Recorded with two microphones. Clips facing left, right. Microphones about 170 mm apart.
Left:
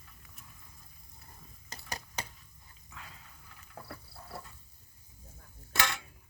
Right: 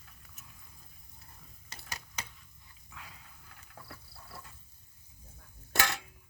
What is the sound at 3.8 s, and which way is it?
Insect, 55° left (ahead or behind).